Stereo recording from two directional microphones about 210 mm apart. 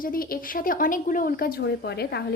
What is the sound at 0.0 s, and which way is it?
Speech, 45° left (ahead or behind).